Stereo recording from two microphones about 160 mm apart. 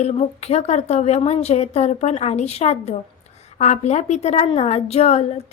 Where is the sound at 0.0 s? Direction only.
40° left (ahead or behind).